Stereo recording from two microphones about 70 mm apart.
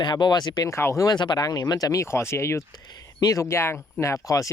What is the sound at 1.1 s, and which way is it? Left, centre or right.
Speech, left.